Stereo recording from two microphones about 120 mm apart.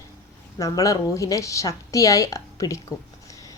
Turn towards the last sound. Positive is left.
turn(degrees=30)  # may be behind; listen again after turning